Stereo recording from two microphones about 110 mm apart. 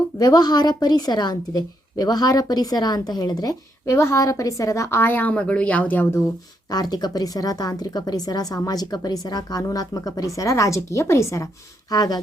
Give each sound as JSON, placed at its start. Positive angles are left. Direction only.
{"t": 0.2, "sound": "a woman's voice", "side_deg": 35}
{"t": 3.8, "sound": "a woman's voice", "side_deg": 25}
{"t": 6.7, "sound": "a woman's voice", "side_deg": 40}
{"t": 11.9, "sound": "a woman's voice", "side_deg": 35}